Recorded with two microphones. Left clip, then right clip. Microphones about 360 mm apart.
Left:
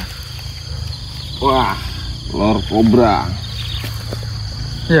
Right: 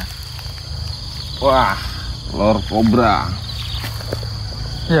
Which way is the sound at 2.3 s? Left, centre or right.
Centre.